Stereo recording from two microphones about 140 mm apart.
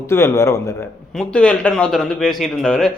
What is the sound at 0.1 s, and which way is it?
Speech, 20° left (ahead or behind).